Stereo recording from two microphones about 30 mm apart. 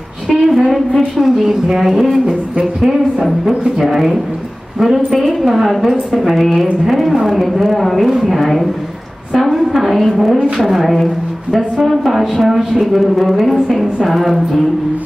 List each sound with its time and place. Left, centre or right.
0.3 s music: centre
1.2 s a woman's voice: centre